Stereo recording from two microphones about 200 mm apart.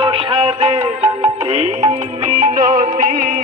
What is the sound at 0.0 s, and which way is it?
Music, 25° right (ahead or behind).